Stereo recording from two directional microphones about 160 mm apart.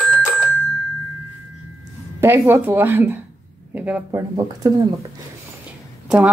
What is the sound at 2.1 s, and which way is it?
Speech, 15° right (ahead or behind).